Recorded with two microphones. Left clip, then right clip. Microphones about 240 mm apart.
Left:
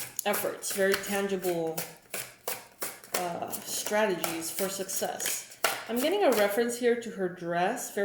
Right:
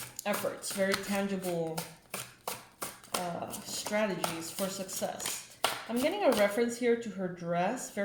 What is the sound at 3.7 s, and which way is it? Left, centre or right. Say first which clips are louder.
Speech: left 5 dB; right.